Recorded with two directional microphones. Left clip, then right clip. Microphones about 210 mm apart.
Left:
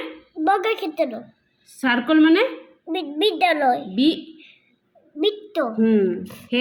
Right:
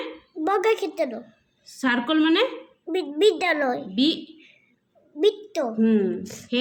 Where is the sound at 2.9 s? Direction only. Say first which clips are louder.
Right 1 dB; 10° right (ahead or behind).